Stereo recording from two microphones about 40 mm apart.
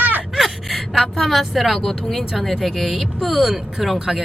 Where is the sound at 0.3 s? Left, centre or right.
Centre.